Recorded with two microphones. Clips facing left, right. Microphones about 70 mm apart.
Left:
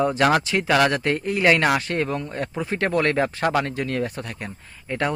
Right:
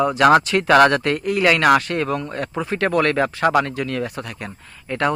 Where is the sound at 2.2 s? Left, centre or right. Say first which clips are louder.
Right 2 dB; right.